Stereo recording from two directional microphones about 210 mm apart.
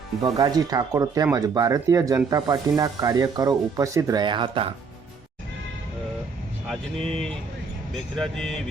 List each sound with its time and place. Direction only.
0.2 s speech: 20° right (ahead or behind)
6.7 s speech: 5° left (ahead or behind)